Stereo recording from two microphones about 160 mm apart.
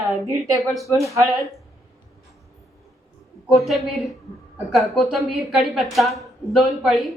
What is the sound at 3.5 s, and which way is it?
A woman's voice, centre (ahead or behind).